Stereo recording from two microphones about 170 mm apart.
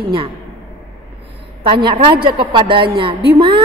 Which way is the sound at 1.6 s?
30° right (ahead or behind).